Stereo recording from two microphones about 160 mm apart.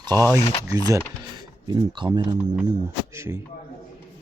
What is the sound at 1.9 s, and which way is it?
Speech, 30° right (ahead or behind).